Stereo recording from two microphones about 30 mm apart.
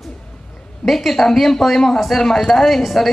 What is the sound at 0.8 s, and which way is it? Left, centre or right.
Speech, centre.